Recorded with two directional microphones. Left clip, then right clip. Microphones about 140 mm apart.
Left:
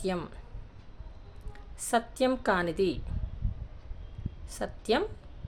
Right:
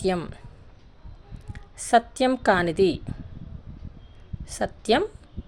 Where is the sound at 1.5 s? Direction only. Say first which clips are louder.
Right 9 dB; 40° right (ahead or behind).